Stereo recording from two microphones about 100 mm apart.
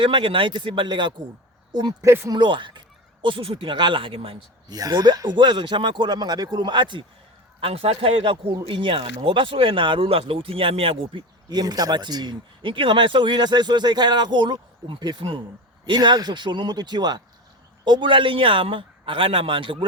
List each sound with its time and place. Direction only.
0.0 s speech: 60° right (ahead or behind)
1.7 s speech: 40° right (ahead or behind)
2.0 s speech: 30° right (ahead or behind)
2.3 s speech: 50° right (ahead or behind)
4.7 s speech: 40° right (ahead or behind)
7.6 s speech: 75° right (ahead or behind)